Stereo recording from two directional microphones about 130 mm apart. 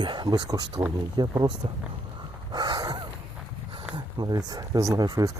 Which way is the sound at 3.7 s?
35° right (ahead or behind).